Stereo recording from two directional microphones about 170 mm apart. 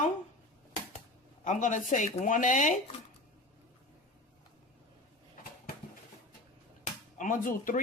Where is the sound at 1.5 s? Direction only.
50° left (ahead or behind).